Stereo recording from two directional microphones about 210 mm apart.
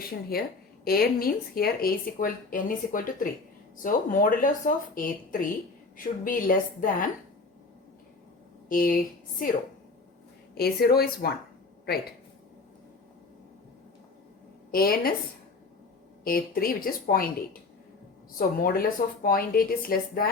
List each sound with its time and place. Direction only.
0.0 s a woman's voice: 45° left (ahead or behind)
8.7 s speech: 40° left (ahead or behind)
10.5 s a woman's voice: 50° left (ahead or behind)
14.7 s a woman's voice: 45° left (ahead or behind)
16.2 s a woman's voice: 45° left (ahead or behind)